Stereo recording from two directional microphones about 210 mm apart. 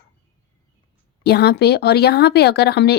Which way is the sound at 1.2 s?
50° left (ahead or behind).